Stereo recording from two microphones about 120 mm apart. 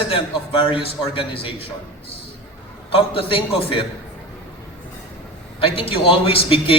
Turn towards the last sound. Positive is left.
turn(degrees=50)  # may be behind; listen again after turning